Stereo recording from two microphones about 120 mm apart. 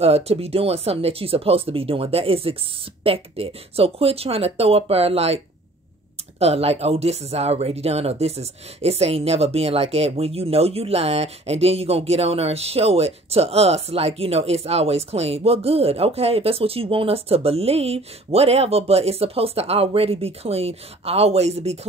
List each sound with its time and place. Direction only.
0.0 s speech: 60° right (ahead or behind)
6.4 s speech: 60° right (ahead or behind)